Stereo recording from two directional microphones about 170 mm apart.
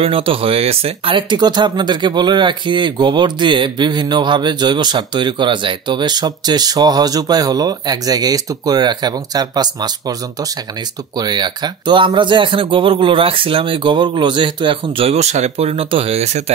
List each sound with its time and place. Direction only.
0.0 s speech: 30° right (ahead or behind)